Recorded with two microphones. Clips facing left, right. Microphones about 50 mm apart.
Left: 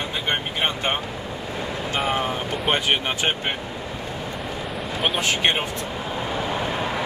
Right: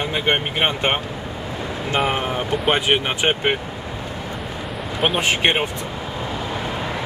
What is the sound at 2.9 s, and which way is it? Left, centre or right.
Speech, right.